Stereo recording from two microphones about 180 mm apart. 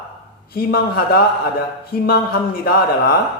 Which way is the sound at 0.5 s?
60° left (ahead or behind).